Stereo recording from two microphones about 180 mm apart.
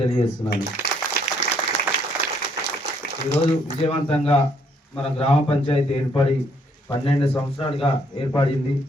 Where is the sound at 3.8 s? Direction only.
30° left (ahead or behind).